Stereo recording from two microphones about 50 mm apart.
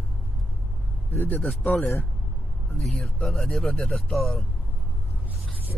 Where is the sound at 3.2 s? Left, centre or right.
Centre.